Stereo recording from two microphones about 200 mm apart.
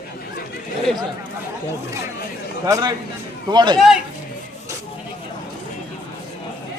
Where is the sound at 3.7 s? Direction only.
Centre (ahead or behind).